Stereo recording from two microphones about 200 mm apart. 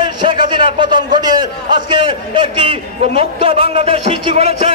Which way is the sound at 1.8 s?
25° right (ahead or behind).